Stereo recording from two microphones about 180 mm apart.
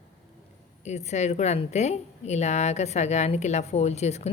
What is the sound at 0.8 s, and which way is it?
A woman's voice, 40° left (ahead or behind).